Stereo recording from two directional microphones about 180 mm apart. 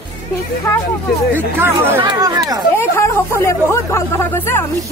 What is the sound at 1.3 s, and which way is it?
Speech, 10° right (ahead or behind).